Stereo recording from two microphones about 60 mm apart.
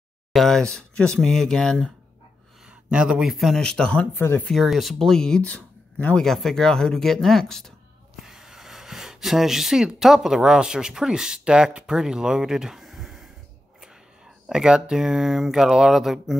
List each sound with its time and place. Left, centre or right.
0.3 s speech: centre
2.9 s speech: centre
3.6 s speech: centre
4.6 s speech: centre
5.5 s a sound: left
6.2 s speech: centre
8.2 s speech: centre